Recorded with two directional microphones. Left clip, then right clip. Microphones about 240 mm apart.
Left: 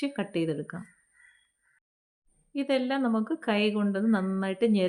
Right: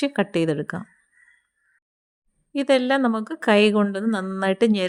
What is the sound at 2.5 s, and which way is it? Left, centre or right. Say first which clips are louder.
A woman's voice: right 9 dB; right.